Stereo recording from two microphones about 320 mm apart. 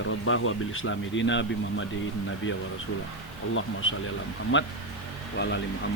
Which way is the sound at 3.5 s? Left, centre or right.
Left.